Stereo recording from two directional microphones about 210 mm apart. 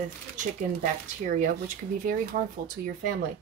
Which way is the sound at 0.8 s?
40° right (ahead or behind).